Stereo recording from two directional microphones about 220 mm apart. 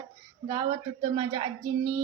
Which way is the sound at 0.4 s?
25° right (ahead or behind).